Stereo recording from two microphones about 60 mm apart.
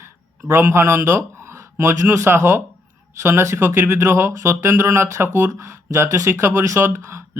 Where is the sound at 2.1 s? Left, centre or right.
Right.